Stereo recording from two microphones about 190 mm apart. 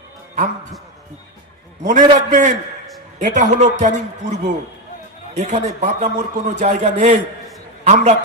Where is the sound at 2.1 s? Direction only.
40° right (ahead or behind).